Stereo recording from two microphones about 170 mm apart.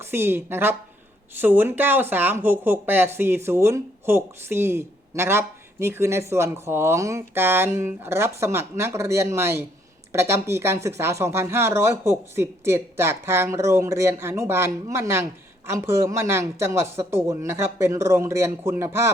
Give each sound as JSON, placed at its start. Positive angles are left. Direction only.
{"t": 0.0, "sound": "speech", "side_deg": -15}